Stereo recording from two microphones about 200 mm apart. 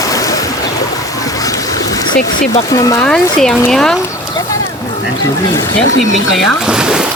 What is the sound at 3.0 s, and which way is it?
Speech, 5° left (ahead or behind).